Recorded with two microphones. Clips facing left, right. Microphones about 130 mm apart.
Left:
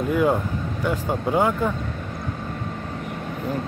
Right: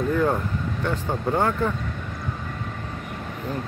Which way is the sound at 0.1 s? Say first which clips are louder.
Left 5 dB; 10° left (ahead or behind).